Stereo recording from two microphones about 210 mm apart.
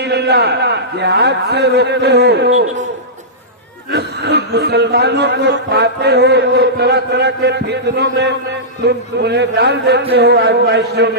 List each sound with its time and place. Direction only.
0.0 s a man's voice: 50° right (ahead or behind)
3.9 s a man's voice: 50° right (ahead or behind)